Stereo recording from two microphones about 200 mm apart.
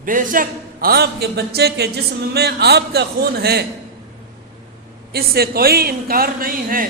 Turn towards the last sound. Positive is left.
turn(degrees=-45)  # may be behind; listen again after turning